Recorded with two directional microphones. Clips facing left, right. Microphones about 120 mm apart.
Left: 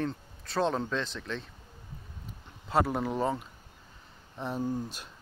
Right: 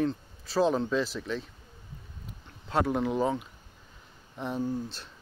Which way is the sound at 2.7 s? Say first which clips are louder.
Right 1 dB; centre (ahead or behind).